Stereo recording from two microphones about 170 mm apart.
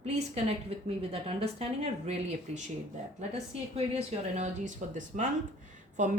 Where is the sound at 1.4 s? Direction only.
35° right (ahead or behind).